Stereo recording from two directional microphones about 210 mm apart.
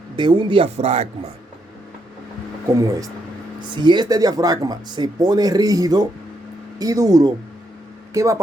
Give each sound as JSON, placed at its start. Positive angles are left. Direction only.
{"t": 0.2, "sound": "speech", "side_deg": -25}
{"t": 2.7, "sound": "speech", "side_deg": -15}